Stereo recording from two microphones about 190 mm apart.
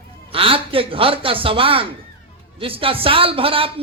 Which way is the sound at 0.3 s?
30° right (ahead or behind).